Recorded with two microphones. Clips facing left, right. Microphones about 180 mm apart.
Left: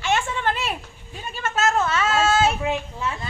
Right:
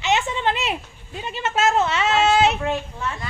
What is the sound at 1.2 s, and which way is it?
A woman's voice, 25° right (ahead or behind).